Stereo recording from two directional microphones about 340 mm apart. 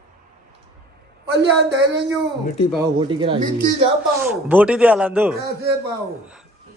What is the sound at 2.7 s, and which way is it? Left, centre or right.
A man's voice, centre.